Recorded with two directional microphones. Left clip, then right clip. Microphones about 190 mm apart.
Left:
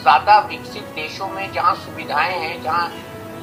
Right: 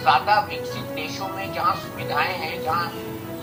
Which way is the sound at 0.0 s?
45° left (ahead or behind).